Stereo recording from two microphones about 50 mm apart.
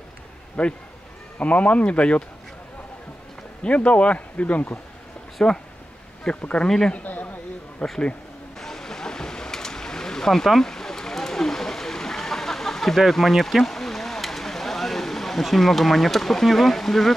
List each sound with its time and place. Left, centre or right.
0.6 s speech: centre
3.6 s speech: left
5.4 s speech: centre
7.8 s speech: centre
8.5 s a sound: centre